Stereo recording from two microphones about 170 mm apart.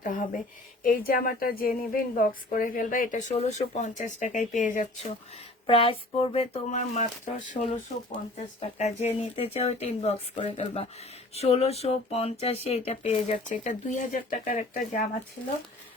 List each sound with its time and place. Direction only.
0.0 s speech: 50° left (ahead or behind)
5.6 s speech: 35° left (ahead or behind)
8.8 s speech: 40° left (ahead or behind)